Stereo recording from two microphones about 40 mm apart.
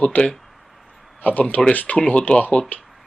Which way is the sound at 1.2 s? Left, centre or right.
Left.